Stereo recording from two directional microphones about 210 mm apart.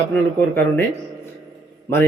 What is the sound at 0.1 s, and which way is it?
Speech, 10° left (ahead or behind).